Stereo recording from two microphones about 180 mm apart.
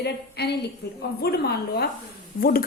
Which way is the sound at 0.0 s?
65° left (ahead or behind).